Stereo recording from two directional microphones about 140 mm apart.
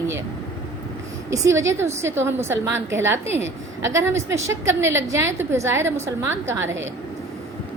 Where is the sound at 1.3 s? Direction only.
20° right (ahead or behind).